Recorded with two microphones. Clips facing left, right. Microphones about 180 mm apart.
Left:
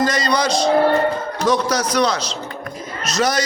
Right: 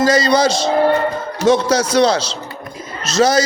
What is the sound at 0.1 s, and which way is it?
A man's voice, 30° right (ahead or behind).